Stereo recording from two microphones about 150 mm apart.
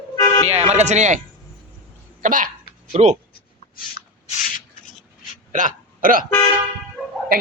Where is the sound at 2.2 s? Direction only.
65° right (ahead or behind).